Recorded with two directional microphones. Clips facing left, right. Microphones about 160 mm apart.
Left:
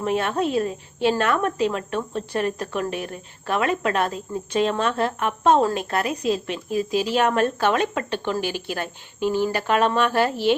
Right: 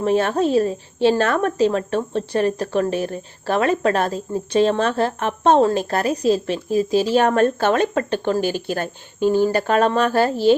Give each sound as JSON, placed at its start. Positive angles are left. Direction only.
{"t": 0.0, "sound": "a woman's voice", "side_deg": -35}